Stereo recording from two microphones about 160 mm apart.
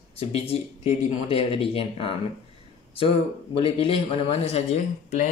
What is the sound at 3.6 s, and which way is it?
Speech, 35° left (ahead or behind).